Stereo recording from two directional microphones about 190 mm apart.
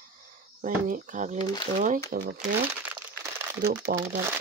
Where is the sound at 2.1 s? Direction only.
55° right (ahead or behind).